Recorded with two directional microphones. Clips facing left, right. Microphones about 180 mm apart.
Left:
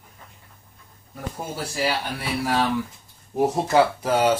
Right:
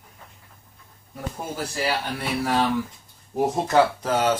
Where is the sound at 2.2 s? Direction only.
5° left (ahead or behind).